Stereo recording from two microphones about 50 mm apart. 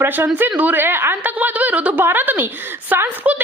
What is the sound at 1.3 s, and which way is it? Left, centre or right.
Speech, right.